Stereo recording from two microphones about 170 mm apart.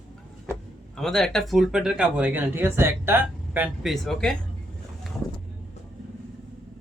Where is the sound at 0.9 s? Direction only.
Centre (ahead or behind).